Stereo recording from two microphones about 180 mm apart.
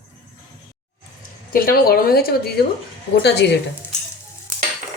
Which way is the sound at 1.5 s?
55° left (ahead or behind).